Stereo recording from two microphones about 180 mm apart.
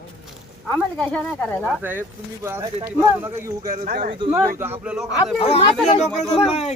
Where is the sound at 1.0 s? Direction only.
10° left (ahead or behind).